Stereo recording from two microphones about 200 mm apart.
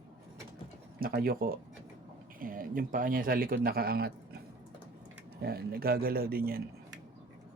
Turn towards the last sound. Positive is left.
turn(degrees=-50)  # may be behind; listen again after turning